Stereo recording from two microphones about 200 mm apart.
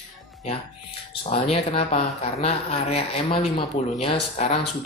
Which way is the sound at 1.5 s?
30° left (ahead or behind).